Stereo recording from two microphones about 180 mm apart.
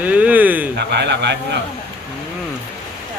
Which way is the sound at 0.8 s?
70° right (ahead or behind).